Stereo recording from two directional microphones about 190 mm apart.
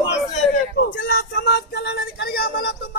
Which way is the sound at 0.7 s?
55° left (ahead or behind).